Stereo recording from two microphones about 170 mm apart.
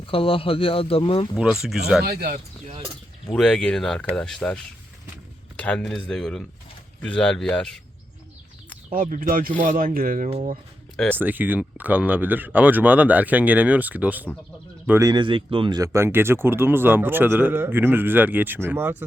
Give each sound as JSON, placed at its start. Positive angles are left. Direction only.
{"t": 0.0, "sound": "speech", "side_deg": 30}
{"t": 2.0, "sound": "speech", "side_deg": -65}
{"t": 3.3, "sound": "speech", "side_deg": 5}
{"t": 9.0, "sound": "speech", "side_deg": -50}
{"t": 10.9, "sound": "speech", "side_deg": 5}
{"t": 11.2, "sound": "speech", "side_deg": -10}